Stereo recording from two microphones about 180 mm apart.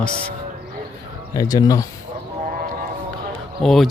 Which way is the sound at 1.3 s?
20° left (ahead or behind).